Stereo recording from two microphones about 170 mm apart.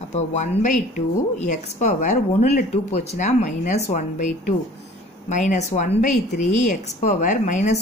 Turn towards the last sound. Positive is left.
turn(degrees=45)  # may be behind; listen again after turning